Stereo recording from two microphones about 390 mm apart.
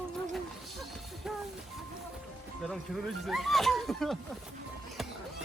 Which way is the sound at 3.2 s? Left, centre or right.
Centre.